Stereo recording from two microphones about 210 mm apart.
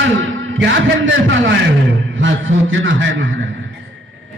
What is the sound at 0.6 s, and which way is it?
Music, 60° right (ahead or behind).